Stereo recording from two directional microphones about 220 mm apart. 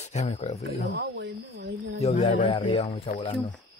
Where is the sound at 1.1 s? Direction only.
55° right (ahead or behind).